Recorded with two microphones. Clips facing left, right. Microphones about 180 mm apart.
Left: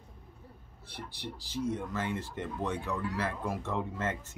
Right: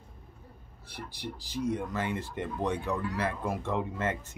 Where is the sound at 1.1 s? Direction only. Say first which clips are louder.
Right 1 dB; 15° right (ahead or behind).